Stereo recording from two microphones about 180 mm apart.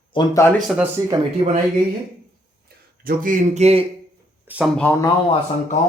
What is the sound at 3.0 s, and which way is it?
Speech, 50° right (ahead or behind).